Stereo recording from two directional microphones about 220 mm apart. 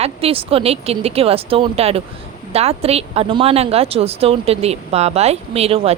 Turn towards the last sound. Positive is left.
turn(degrees=-25)  # may be behind; listen again after turning